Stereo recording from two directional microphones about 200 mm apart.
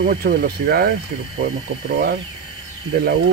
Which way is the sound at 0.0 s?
55° right (ahead or behind).